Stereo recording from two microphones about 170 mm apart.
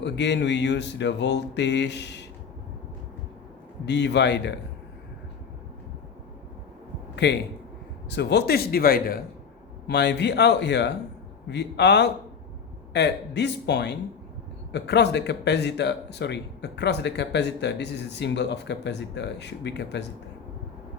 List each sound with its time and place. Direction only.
0.0 s speech: 90° left
3.8 s speech: 90° left
7.2 s speech: 90° left
8.1 s speech: 75° left (ahead or behind); by 9.2 s 60° left (ahead or behind)
9.8 s speech: 85° left